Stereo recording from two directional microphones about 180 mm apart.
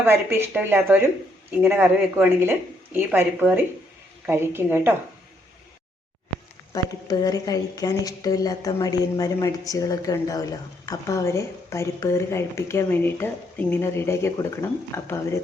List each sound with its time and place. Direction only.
0.0 s speech: 15° right (ahead or behind)
6.7 s a woman's voice: 20° left (ahead or behind)